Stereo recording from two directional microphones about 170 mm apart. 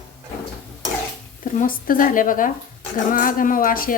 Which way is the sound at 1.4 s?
55° left (ahead or behind).